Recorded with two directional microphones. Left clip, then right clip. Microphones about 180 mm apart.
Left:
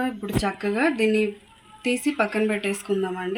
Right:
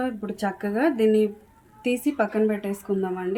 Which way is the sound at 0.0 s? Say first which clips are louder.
Left 2 dB; 10° right (ahead or behind).